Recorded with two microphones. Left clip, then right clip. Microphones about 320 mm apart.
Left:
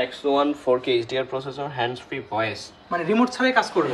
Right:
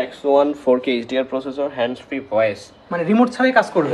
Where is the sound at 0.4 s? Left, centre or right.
Centre.